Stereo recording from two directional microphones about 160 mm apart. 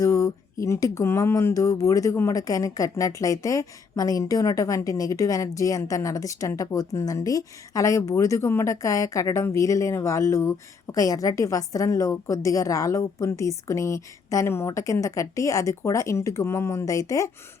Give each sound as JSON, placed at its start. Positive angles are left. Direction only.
{"t": 0.0, "sound": "speech", "side_deg": 20}